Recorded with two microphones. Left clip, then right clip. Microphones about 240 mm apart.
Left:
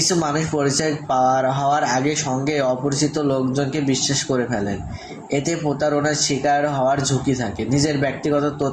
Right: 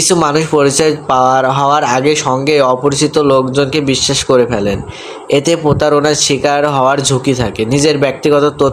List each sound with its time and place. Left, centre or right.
0.1 s speech: right